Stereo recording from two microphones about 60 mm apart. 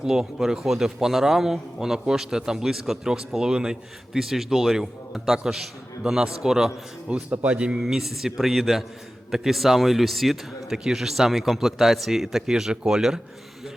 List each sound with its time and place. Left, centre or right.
0.0 s a man's voice: centre
7.3 s a man's voice: right
7.8 s speech: centre